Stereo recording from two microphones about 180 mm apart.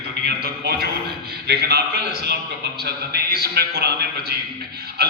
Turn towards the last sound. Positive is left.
turn(degrees=-60)  # may be behind; listen again after turning